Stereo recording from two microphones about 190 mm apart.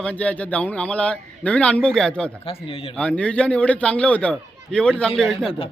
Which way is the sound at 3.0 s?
5° left (ahead or behind).